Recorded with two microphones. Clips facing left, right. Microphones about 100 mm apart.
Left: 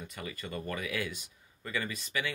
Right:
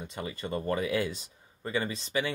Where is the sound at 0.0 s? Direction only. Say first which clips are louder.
Right 5 dB; 25° right (ahead or behind).